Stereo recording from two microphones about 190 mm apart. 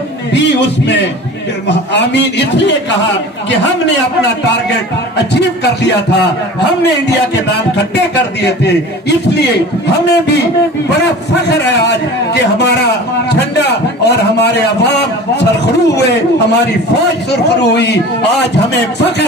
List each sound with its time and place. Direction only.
0.3 s a man's voice: 65° left (ahead or behind)
10.0 s a man's voice: 60° left (ahead or behind)